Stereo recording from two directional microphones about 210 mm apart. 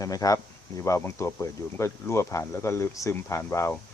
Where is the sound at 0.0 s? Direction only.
15° left (ahead or behind).